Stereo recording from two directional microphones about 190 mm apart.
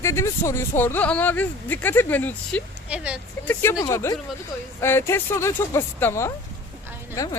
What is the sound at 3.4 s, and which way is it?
Speech, 15° left (ahead or behind).